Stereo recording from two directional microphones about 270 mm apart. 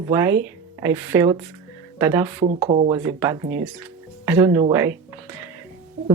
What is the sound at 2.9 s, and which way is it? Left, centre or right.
Speech, centre.